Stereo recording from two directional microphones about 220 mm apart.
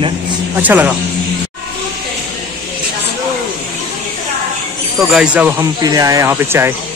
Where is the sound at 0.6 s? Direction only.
5° right (ahead or behind).